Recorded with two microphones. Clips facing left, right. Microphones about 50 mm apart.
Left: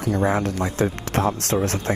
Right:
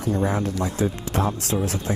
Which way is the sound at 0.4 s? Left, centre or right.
Left.